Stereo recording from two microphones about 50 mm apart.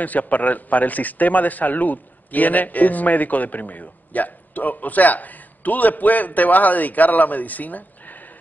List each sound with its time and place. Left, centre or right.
0.0 s a man's voice: left